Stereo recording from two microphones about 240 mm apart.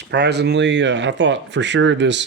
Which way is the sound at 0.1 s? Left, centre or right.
Right.